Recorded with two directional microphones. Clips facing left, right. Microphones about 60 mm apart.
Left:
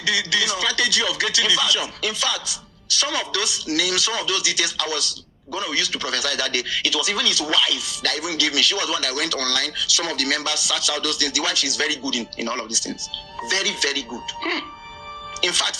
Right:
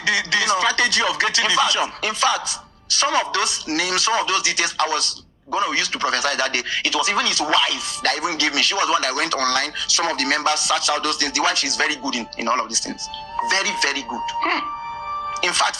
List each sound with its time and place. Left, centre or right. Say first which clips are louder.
0.0 s speech: right 3 dB; right